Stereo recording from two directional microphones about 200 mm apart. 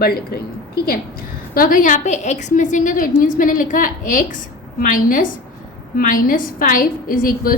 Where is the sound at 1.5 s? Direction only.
45° left (ahead or behind).